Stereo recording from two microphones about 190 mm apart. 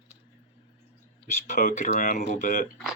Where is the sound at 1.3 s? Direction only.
40° left (ahead or behind).